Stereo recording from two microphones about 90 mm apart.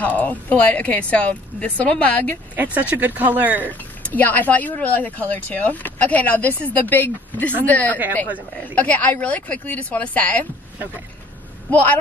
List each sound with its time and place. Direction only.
0.0 s a woman's voice: 20° left (ahead or behind)
2.5 s speech: 20° right (ahead or behind)
3.6 s a woman's voice: 20° left (ahead or behind)
11.7 s a woman's voice: 15° left (ahead or behind)